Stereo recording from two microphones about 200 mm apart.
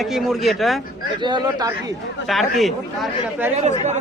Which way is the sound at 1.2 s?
20° right (ahead or behind).